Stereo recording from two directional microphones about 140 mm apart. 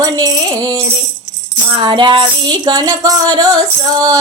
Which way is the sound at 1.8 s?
35° right (ahead or behind).